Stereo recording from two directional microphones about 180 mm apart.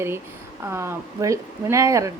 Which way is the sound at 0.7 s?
15° right (ahead or behind).